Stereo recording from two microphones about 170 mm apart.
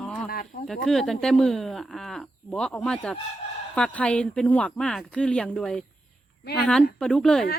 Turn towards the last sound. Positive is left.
turn(degrees=5)  # may be behind; listen again after turning